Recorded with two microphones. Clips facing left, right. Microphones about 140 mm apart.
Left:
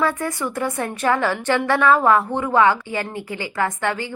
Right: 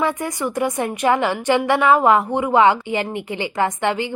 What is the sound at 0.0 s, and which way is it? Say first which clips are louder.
A woman's voice: right 1 dB; 20° right (ahead or behind).